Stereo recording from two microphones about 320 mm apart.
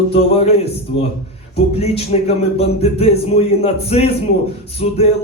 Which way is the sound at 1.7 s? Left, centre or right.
Centre.